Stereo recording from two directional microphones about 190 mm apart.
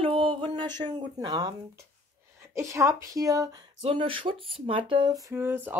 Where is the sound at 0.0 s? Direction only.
30° right (ahead or behind).